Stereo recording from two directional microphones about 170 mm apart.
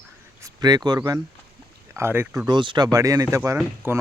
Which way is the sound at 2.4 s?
25° right (ahead or behind).